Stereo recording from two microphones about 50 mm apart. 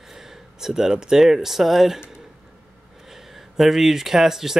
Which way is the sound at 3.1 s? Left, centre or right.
Centre.